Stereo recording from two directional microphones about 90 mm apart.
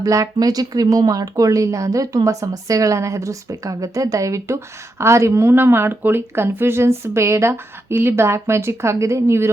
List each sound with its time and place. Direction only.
0.0 s speech: 40° right (ahead or behind)